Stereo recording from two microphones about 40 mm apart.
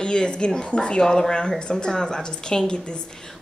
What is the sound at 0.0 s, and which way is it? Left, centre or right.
Speech, left.